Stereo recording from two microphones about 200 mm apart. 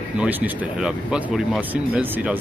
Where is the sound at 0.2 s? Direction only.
5° right (ahead or behind).